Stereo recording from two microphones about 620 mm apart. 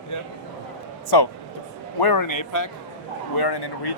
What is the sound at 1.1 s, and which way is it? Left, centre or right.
Speech, left.